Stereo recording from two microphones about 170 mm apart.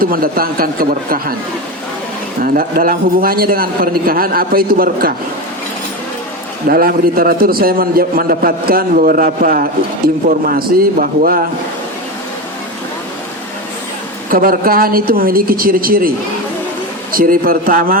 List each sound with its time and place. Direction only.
0.0 s a man's voice: 60° right (ahead or behind)
2.4 s a man's voice: 60° right (ahead or behind)
6.7 s a man's voice: 60° right (ahead or behind)
14.3 s a man's voice: 55° right (ahead or behind)